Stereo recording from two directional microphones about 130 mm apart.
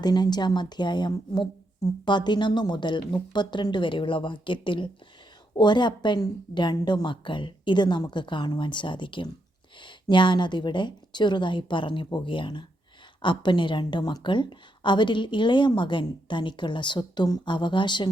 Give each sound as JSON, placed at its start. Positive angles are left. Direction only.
{"t": 0.0, "sound": "a woman's voice", "side_deg": 35}